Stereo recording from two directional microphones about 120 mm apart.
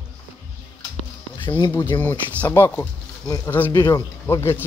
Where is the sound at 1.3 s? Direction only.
40° left (ahead or behind).